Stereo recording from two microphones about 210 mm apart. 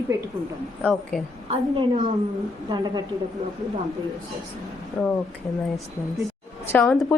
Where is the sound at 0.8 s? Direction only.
5° left (ahead or behind).